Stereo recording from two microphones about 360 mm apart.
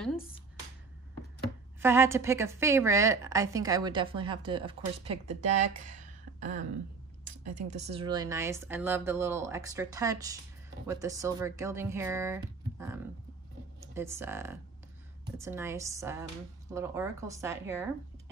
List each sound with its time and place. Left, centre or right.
1.8 s a woman's voice: centre
5.9 s a sound: right
7.2 s a woman's voice: centre